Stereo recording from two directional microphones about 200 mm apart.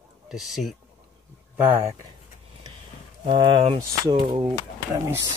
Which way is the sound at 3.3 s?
25° right (ahead or behind).